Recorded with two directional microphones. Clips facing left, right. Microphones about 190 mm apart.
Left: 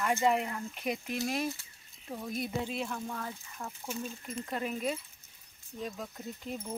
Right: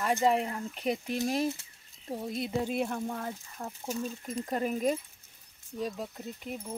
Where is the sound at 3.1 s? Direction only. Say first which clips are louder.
Right 3 dB; 35° right (ahead or behind).